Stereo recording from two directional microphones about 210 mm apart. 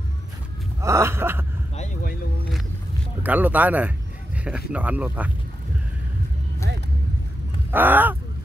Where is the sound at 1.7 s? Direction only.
35° left (ahead or behind).